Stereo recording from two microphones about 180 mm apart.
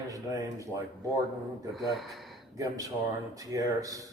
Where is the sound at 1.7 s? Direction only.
Centre (ahead or behind).